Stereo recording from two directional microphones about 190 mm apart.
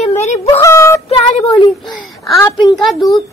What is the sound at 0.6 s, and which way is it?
Child singing, 15° left (ahead or behind).